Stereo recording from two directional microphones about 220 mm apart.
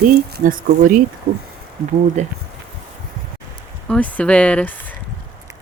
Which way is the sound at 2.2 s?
30° right (ahead or behind).